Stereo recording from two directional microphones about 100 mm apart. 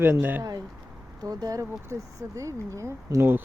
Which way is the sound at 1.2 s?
40° right (ahead or behind).